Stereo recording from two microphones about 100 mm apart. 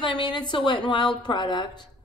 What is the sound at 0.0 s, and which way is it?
A woman's voice, 50° left (ahead or behind).